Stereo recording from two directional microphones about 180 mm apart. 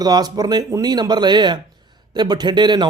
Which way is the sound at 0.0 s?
20° right (ahead or behind).